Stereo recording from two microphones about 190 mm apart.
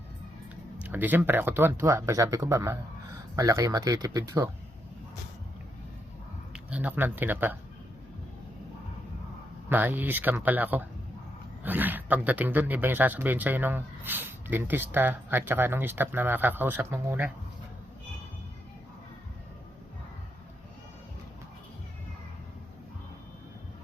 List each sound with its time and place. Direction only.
0.8 s speech: 10° right (ahead or behind)
6.5 s speech: 5° right (ahead or behind)
9.6 s speech: 10° right (ahead or behind)